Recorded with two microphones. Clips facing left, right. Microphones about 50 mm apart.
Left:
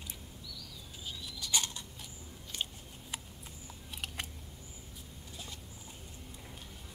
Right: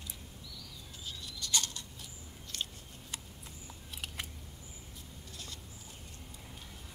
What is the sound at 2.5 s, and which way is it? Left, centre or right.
Biting, centre.